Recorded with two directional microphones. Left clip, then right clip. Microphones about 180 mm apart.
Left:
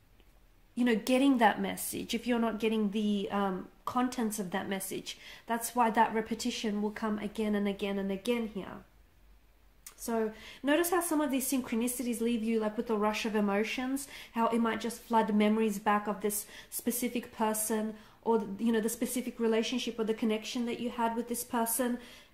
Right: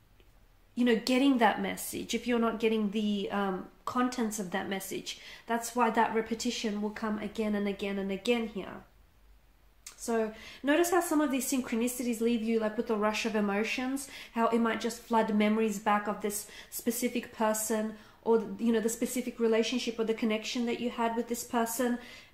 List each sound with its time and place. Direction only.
0.7 s speech: 35° left (ahead or behind)
10.0 s speech: 35° left (ahead or behind)